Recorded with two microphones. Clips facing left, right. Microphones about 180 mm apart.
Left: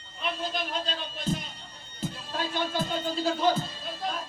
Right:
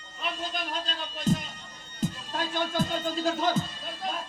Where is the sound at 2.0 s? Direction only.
45° right (ahead or behind).